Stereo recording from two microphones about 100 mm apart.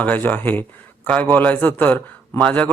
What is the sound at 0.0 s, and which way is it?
A man's voice, 15° left (ahead or behind).